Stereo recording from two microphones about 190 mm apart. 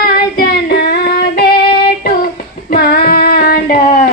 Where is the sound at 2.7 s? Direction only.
55° left (ahead or behind).